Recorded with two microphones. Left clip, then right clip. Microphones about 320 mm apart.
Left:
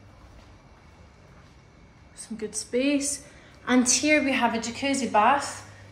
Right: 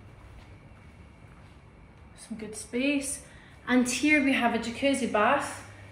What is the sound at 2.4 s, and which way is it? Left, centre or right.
A woman's voice, centre.